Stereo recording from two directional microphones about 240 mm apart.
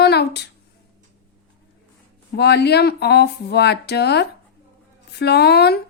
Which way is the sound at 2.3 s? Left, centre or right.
Left.